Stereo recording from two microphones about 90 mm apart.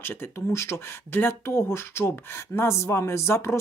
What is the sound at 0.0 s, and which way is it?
Speech, 25° left (ahead or behind).